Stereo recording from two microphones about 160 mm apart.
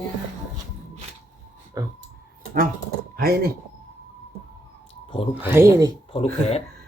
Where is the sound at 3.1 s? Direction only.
70° right (ahead or behind).